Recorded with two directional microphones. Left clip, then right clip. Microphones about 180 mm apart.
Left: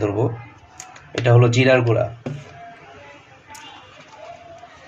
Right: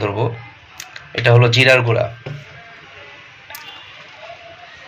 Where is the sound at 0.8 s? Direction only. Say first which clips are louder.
Right 5 dB; 10° left (ahead or behind).